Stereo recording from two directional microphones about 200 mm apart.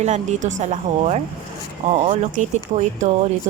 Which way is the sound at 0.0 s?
35° right (ahead or behind).